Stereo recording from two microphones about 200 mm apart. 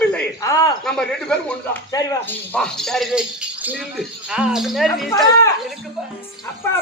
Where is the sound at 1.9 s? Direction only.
10° left (ahead or behind).